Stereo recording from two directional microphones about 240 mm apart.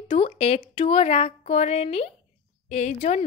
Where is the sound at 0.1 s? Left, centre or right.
Left.